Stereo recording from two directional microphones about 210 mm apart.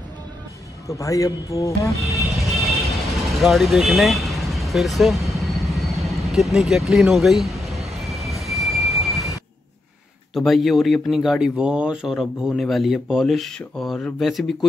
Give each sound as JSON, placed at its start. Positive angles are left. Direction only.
{"t": 0.8, "sound": "speech", "side_deg": 15}
{"t": 2.3, "sound": "vehicle", "side_deg": 0}
{"t": 10.3, "sound": "speech", "side_deg": 0}